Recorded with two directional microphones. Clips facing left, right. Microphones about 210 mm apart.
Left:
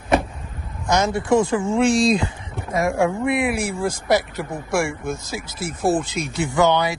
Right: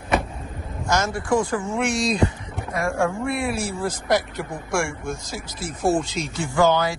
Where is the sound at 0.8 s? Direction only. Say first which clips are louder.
Left 4 dB; 15° left (ahead or behind).